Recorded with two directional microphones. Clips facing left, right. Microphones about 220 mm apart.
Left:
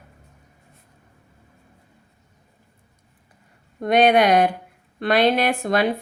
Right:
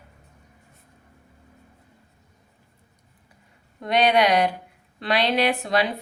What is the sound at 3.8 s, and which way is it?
A woman's voice, 50° left (ahead or behind).